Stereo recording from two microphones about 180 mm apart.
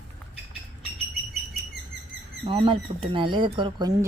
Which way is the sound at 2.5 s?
30° right (ahead or behind).